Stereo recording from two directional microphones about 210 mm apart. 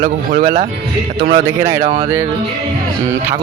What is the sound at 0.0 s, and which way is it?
Speech, 35° right (ahead or behind).